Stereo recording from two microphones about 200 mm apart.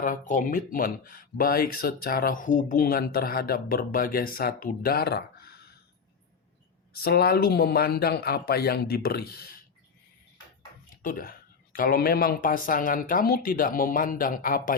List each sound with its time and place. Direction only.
0.0 s speech: 40° left (ahead or behind)
6.9 s speech: 50° left (ahead or behind)
10.8 s speech: 45° left (ahead or behind)